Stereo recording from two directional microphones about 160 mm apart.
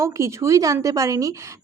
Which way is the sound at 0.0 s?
20° right (ahead or behind).